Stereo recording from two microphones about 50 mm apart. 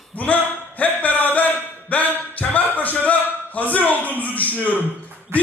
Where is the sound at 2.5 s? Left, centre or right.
Left.